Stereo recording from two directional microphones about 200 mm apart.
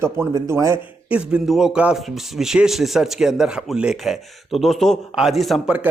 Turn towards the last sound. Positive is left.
turn(degrees=-5)  # may be behind; listen again after turning